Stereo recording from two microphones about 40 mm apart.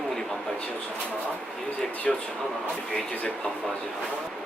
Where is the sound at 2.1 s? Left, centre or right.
Centre.